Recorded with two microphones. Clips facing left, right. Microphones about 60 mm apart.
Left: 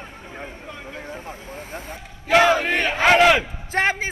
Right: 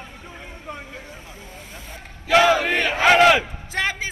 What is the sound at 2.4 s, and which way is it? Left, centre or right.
Battle cry, left.